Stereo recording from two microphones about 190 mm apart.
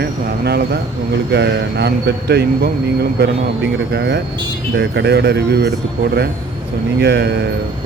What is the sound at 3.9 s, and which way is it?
Speech, 65° right (ahead or behind).